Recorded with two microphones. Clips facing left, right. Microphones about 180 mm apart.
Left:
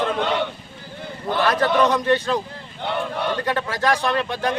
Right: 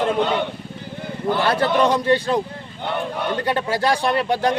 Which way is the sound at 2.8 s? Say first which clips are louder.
Even; 10° right (ahead or behind).